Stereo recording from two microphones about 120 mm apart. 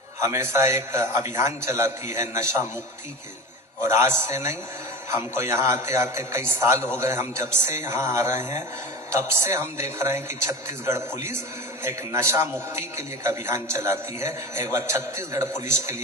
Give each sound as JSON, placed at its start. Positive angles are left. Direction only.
{"t": 0.2, "sound": "a man's voice", "side_deg": -25}
{"t": 3.8, "sound": "a man's voice", "side_deg": -20}